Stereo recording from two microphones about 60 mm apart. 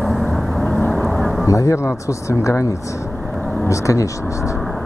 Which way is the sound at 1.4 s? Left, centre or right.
Left.